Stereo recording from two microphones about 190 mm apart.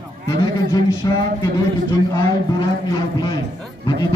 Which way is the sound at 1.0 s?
20° left (ahead or behind).